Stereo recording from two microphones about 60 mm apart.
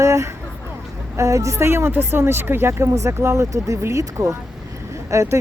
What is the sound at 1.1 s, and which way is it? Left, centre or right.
Speech, right.